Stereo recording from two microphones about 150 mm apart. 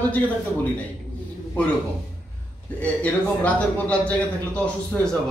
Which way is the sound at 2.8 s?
10° left (ahead or behind).